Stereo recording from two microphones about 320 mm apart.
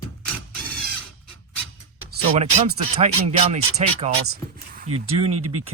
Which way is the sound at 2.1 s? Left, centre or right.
Right.